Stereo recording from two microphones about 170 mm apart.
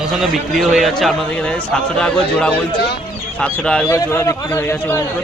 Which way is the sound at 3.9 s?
20° left (ahead or behind).